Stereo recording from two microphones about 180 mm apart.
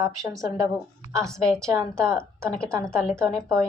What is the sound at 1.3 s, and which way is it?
A woman's voice, 5° left (ahead or behind).